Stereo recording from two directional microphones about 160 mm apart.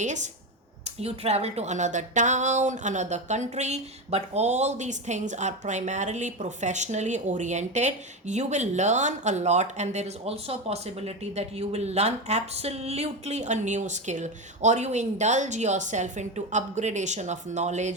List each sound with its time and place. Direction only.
0.0 s speech: 50° right (ahead or behind)